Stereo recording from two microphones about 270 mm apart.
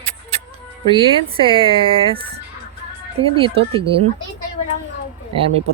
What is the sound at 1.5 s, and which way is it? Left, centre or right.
Speech, centre.